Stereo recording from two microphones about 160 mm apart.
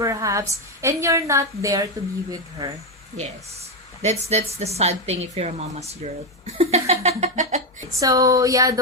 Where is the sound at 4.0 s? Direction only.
45° right (ahead or behind).